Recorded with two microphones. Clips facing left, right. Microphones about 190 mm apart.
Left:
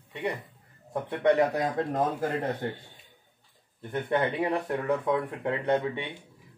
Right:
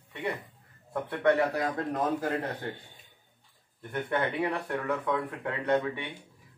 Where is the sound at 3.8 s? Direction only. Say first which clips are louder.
Left 3 dB; 25° left (ahead or behind).